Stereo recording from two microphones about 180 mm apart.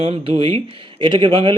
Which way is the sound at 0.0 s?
30° right (ahead or behind).